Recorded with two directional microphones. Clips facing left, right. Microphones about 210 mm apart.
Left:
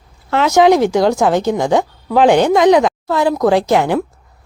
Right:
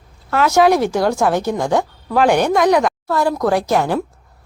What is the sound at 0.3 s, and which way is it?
A woman's voice, 20° left (ahead or behind).